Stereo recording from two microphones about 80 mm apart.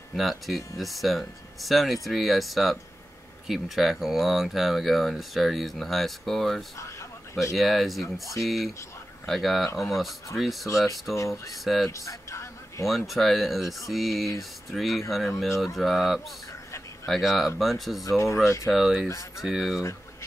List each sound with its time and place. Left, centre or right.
0.1 s speech: centre
6.8 s a sound: left
7.5 s speech: centre
11.1 s speech: left
11.6 s speech: centre
11.9 s a sound: left
12.8 s speech: centre
18.0 s speech: left
18.7 s speech: centre